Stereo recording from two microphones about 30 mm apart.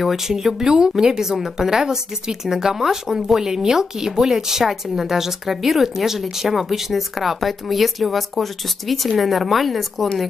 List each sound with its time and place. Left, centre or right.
0.0 s speech: centre